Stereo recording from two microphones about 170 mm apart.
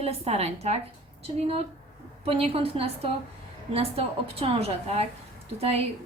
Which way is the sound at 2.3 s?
35° right (ahead or behind).